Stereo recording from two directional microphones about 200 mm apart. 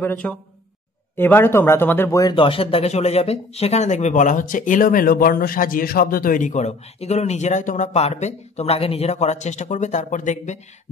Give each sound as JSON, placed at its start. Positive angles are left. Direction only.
{"t": 0.0, "sound": "speech", "side_deg": 10}